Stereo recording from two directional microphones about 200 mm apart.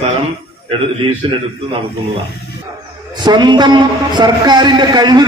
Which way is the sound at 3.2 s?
20° right (ahead or behind).